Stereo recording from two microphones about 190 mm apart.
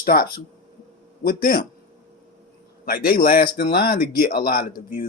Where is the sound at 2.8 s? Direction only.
50° left (ahead or behind).